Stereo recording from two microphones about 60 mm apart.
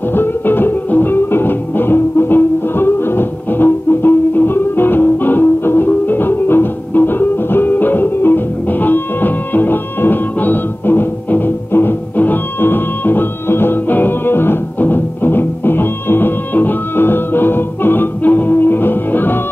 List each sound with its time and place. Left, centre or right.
0.1 s music: left